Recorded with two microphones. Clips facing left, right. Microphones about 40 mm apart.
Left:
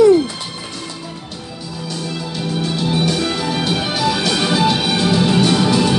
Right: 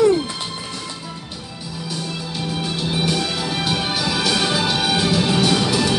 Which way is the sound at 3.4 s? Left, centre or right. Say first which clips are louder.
Left 3 dB; centre.